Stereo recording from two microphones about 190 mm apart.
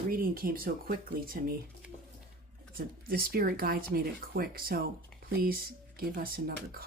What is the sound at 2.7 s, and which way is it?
Speech, 50° right (ahead or behind).